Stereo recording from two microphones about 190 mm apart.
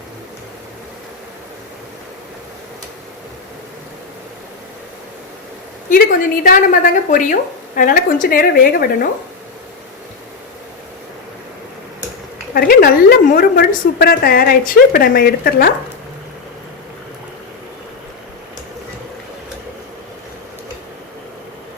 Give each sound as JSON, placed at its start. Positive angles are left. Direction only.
{"t": 6.4, "sound": "a woman's voice", "side_deg": 45}
{"t": 12.5, "sound": "a woman's voice", "side_deg": 50}